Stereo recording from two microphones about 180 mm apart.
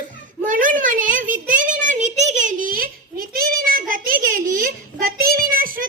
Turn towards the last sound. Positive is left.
turn(degrees=-50)  # may be behind; listen again after turning